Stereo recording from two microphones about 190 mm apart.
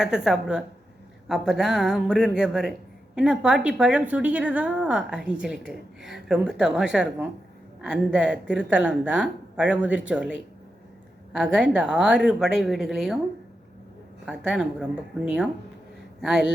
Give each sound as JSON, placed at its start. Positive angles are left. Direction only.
{"t": 0.0, "sound": "a woman's voice", "side_deg": -5}
{"t": 14.3, "sound": "a woman's voice", "side_deg": -5}